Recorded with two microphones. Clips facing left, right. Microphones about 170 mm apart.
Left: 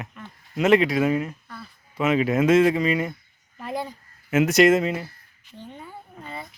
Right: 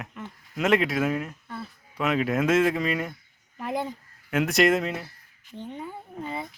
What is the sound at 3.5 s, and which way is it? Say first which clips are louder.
Speech: right 1 dB; 20° right (ahead or behind).